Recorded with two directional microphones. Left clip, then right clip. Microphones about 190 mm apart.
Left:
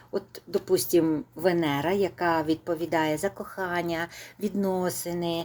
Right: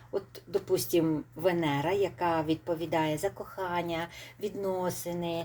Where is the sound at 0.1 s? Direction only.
30° left (ahead or behind).